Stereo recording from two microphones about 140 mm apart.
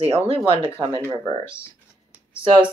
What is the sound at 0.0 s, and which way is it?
Speech, 45° right (ahead or behind).